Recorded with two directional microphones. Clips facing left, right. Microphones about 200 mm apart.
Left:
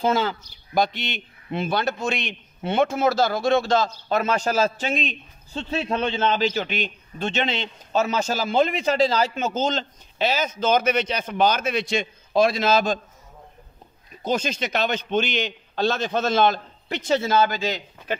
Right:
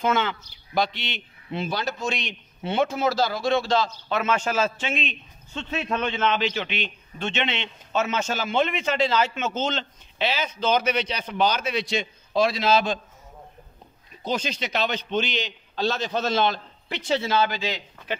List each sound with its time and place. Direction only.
0.0 s speech: 35° left (ahead or behind)
14.2 s speech: 45° left (ahead or behind)